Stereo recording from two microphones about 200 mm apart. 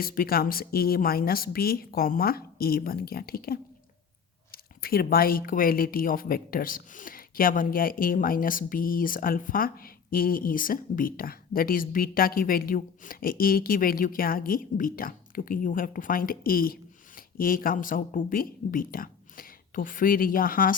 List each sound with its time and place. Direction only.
0.0 s speech: 45° left (ahead or behind)